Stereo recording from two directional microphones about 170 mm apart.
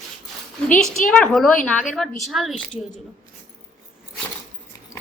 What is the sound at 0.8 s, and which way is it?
A woman's voice, centre (ahead or behind).